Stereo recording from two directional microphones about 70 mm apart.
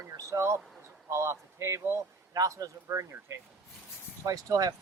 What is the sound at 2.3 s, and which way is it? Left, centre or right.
Speech, right.